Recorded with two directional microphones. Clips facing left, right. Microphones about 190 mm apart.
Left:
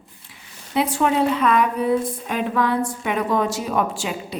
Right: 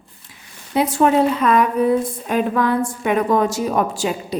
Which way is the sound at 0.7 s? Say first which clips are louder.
Right 4 dB; 40° right (ahead or behind).